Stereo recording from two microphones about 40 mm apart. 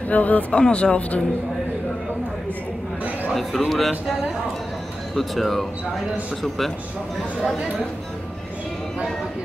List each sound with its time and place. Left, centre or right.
0.1 s speech: left
0.6 s speech: left
3.3 s speech: centre
5.1 s speech: centre